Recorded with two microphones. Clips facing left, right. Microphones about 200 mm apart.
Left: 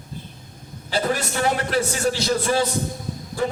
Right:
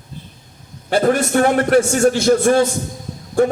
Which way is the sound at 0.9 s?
50° right (ahead or behind).